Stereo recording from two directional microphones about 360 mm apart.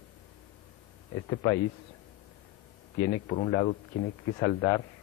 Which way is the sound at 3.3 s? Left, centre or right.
Centre.